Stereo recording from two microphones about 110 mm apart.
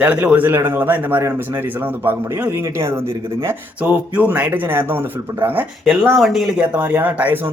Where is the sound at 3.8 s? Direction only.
15° right (ahead or behind).